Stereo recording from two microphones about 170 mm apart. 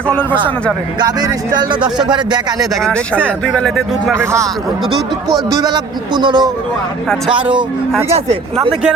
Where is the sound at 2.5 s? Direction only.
Centre (ahead or behind).